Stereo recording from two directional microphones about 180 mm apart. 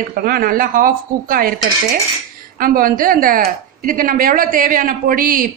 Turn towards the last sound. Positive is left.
turn(degrees=-50)  # may be behind; listen again after turning